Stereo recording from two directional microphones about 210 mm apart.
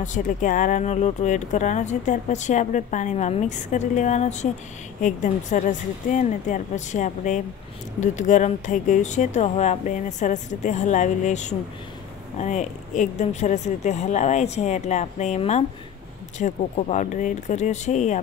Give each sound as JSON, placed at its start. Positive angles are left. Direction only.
{"t": 0.0, "sound": "speech", "side_deg": 35}